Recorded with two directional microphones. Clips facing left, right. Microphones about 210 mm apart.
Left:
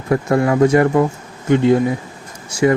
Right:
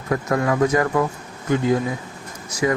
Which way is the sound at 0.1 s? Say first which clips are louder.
Left 5 dB; 30° left (ahead or behind).